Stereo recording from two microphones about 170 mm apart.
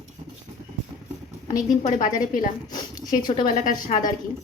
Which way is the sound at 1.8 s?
45° left (ahead or behind).